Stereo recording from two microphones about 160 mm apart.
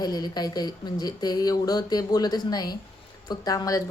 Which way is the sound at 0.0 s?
25° left (ahead or behind).